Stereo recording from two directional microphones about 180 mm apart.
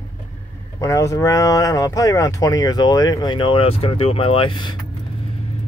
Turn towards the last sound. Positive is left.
turn(degrees=25)  # may be behind; listen again after turning